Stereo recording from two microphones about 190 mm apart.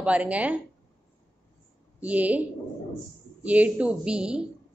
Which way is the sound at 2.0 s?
10° right (ahead or behind).